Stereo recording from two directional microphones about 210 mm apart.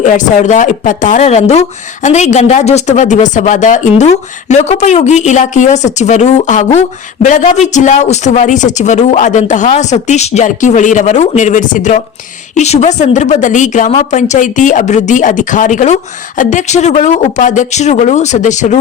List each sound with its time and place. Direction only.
0.0 s speech: 35° left (ahead or behind)